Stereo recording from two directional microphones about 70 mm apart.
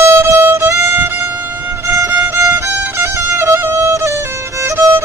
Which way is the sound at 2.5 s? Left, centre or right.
Right.